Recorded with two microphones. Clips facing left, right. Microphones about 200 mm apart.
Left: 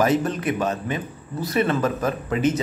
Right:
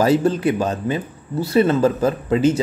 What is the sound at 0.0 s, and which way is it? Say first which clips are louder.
Speech: right 4 dB; 30° right (ahead or behind).